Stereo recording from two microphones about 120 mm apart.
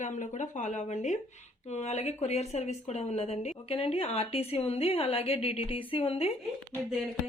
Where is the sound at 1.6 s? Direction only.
70° left (ahead or behind); by 6.3 s 50° left (ahead or behind).